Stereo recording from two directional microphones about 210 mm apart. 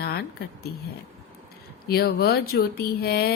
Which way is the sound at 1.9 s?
50° left (ahead or behind).